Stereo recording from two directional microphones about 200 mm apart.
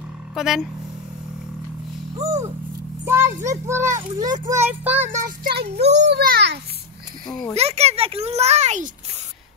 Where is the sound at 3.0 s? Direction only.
10° right (ahead or behind).